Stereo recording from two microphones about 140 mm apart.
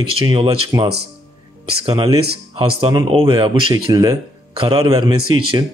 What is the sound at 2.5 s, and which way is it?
A man's voice, 40° right (ahead or behind).